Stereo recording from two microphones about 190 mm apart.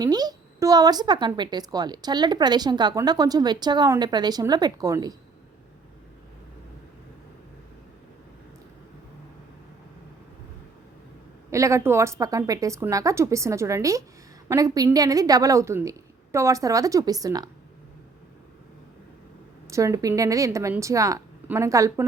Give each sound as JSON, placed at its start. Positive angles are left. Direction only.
{"t": 0.0, "sound": "speech", "side_deg": -20}
{"t": 11.5, "sound": "a woman's voice", "side_deg": -15}
{"t": 19.6, "sound": "a woman's voice", "side_deg": -15}